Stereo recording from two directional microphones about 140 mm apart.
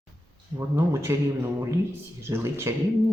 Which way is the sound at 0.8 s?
20° right (ahead or behind).